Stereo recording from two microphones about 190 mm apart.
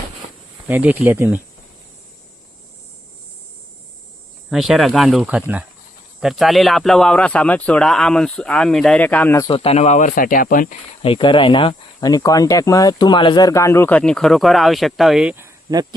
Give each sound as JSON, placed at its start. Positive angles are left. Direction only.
{"t": 0.7, "sound": "speech", "side_deg": -10}
{"t": 4.4, "sound": "speech", "side_deg": 0}
{"t": 9.5, "sound": "speech", "side_deg": 35}
{"t": 11.0, "sound": "speech", "side_deg": 25}